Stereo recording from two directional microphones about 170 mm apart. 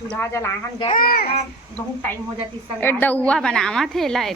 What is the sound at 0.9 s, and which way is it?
Speech, 60° left (ahead or behind).